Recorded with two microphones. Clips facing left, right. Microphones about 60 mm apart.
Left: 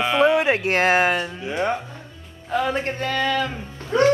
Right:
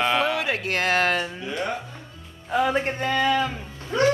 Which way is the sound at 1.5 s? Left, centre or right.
Left.